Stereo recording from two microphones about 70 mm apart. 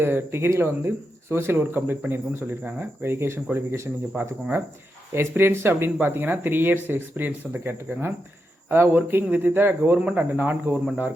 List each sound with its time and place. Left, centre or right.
0.0 s speech: right